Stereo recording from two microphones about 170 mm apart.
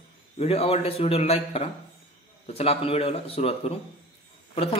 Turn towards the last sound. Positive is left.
turn(degrees=35)  # may be behind; listen again after turning